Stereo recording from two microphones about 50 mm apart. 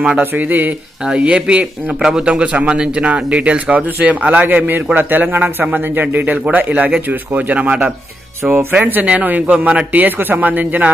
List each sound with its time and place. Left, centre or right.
0.2 s speech: right
1.0 s speech: right
2.0 s a man's voice: centre
2.2 s speech: right
8.4 s a man's voice: centre
8.8 s speech: right
10.0 s speech: right